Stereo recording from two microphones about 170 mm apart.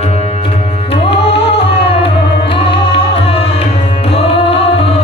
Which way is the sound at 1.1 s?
35° left (ahead or behind).